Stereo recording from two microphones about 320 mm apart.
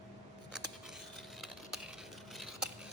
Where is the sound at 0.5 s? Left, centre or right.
Centre.